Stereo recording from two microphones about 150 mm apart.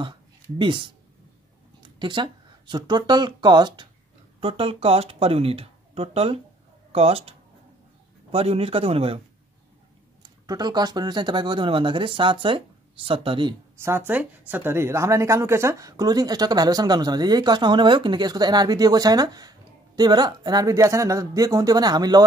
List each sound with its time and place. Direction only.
0.6 s speech: 35° right (ahead or behind)
10.2 s speech: 25° right (ahead or behind)
13.8 s speech: 15° right (ahead or behind)